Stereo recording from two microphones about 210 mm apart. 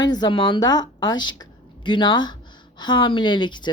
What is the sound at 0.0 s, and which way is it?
A woman's voice, 20° left (ahead or behind).